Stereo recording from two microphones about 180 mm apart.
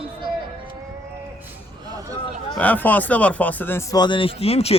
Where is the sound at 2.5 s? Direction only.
10° left (ahead or behind); by 4.7 s 35° left (ahead or behind).